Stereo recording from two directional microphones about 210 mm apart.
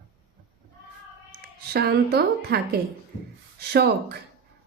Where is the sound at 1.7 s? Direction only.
50° right (ahead or behind).